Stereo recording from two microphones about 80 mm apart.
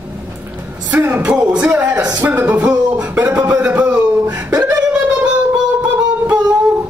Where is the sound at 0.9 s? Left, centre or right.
Right.